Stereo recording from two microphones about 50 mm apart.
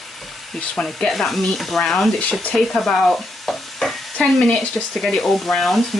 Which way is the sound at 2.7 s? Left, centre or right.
Centre.